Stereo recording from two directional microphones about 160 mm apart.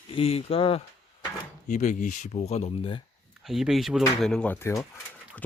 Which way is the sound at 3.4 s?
Centre (ahead or behind).